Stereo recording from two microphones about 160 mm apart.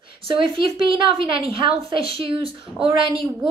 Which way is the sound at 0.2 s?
30° right (ahead or behind).